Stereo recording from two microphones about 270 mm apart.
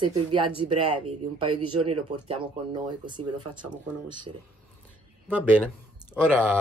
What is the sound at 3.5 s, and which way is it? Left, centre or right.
Speech, centre.